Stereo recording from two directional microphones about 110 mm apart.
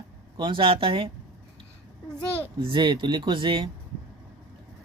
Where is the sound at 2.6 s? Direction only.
45° right (ahead or behind).